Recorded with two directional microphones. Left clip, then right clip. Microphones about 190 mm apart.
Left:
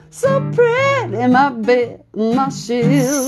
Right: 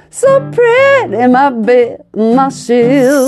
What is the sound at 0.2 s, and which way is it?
Speech, 50° right (ahead or behind).